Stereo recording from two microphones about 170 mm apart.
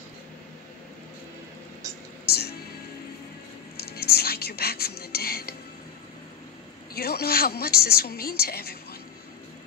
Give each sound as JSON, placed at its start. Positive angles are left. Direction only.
{"t": 2.2, "sound": "music", "side_deg": 70}
{"t": 3.7, "sound": "whispering", "side_deg": 65}
{"t": 6.9, "sound": "a woman's voice", "side_deg": 65}